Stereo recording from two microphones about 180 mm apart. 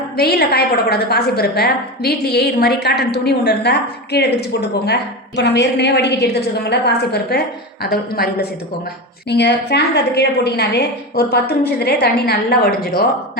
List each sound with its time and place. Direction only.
0.2 s a woman's voice: 60° left (ahead or behind)
9.3 s a woman's voice: 70° left (ahead or behind)